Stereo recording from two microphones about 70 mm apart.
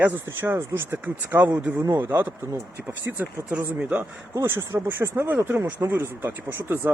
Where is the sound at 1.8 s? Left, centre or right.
Right.